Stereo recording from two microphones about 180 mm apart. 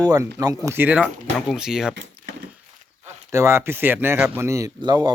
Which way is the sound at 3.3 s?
15° right (ahead or behind).